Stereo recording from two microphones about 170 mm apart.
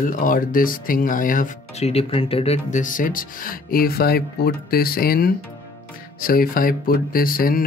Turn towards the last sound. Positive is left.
turn(degrees=60)  # may be behind; listen again after turning